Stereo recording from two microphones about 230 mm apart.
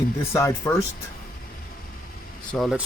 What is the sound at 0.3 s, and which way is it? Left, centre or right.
Speech, centre.